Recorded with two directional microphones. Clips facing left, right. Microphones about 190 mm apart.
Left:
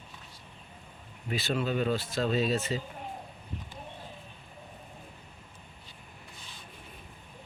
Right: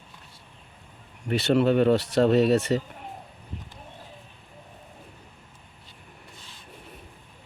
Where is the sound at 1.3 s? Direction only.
70° right (ahead or behind).